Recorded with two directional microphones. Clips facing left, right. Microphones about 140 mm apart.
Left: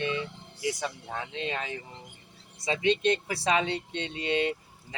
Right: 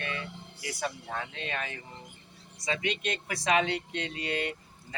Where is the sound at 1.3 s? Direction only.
25° left (ahead or behind).